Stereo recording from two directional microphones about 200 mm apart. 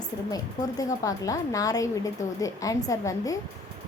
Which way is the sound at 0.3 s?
20° left (ahead or behind).